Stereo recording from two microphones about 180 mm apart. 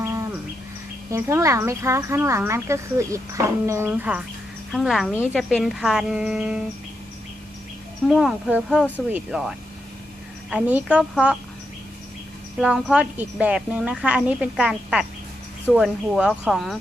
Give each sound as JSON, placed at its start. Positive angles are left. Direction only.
{"t": 0.0, "sound": "bird", "side_deg": -15}
{"t": 1.1, "sound": "speech", "side_deg": -15}
{"t": 8.0, "sound": "speech", "side_deg": 0}
{"t": 12.5, "sound": "speech", "side_deg": -5}